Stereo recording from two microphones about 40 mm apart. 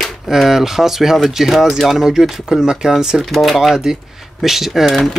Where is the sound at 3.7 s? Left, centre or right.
Centre.